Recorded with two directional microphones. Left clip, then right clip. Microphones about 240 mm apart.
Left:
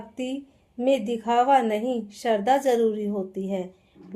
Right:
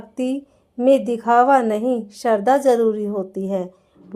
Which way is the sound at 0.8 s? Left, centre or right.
Right.